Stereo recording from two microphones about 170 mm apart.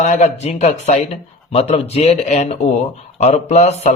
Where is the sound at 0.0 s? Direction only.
45° left (ahead or behind).